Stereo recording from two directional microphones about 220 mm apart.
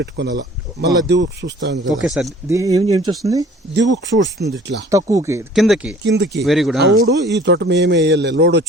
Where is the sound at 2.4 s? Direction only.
15° right (ahead or behind).